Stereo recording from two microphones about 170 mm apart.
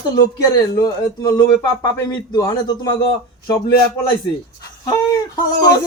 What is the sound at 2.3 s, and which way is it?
Speech, 25° left (ahead or behind).